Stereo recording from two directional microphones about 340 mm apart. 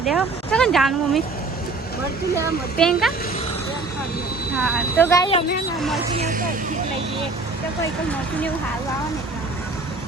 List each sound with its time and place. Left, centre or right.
0.0 s speech: centre
2.7 s speech: centre
4.5 s speech: centre
6.1 s music: right